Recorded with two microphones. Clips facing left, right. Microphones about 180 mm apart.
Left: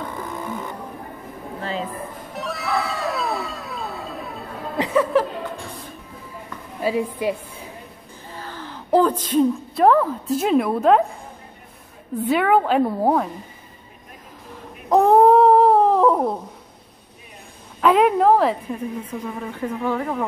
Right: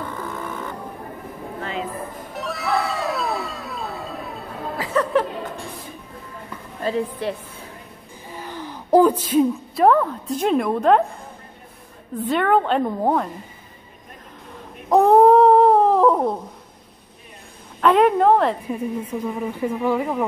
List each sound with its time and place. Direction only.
0.3 s music: 10° left (ahead or behind)
1.6 s a sound: 35° left (ahead or behind)
2.3 s music: centre (ahead or behind)
4.7 s chuckle: 15° left (ahead or behind)
6.8 s a woman's voice: 10° left (ahead or behind)
8.3 s speech: 15° right (ahead or behind); by 11.1 s 5° left (ahead or behind)
12.2 s a woman's voice: 5° left (ahead or behind)
14.5 s humming: centre (ahead or behind)
17.7 s a sound: 5° left (ahead or behind)
18.7 s a woman's voice: 10° right (ahead or behind)